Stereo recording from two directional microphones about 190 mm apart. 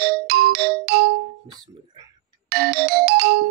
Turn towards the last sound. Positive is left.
turn(degrees=-55)  # may be behind; listen again after turning